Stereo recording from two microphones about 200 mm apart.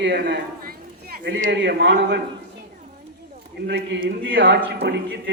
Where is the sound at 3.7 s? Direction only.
55° right (ahead or behind).